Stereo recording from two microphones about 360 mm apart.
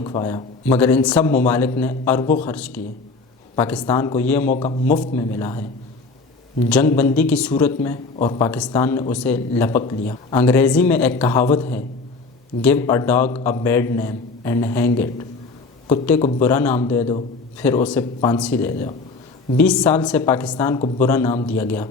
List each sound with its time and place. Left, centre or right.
0.0 s speech: centre
4.5 s a man's voice: centre
4.9 s a man's voice: centre
6.7 s a man's voice: centre
12.6 s a man's voice: centre